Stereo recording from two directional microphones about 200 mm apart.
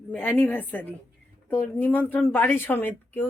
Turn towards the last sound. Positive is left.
turn(degrees=10)  # may be behind; listen again after turning